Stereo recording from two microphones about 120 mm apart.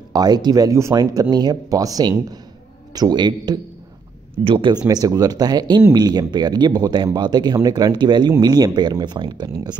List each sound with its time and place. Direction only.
0.1 s speech: 35° right (ahead or behind)
4.8 s speech: 30° right (ahead or behind)